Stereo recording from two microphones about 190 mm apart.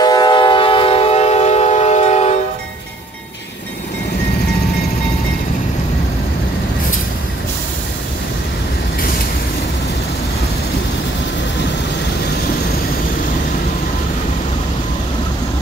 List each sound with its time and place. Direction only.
0.0 s train: 20° left (ahead or behind)